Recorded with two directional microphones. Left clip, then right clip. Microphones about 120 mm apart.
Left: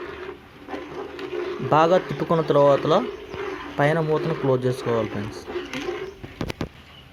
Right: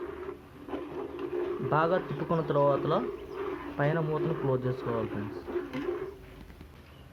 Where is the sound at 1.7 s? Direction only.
40° left (ahead or behind).